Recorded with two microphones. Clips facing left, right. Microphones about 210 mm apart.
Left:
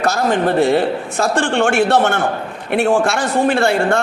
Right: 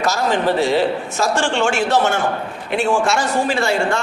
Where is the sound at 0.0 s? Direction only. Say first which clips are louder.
Left 2 dB; 55° left (ahead or behind).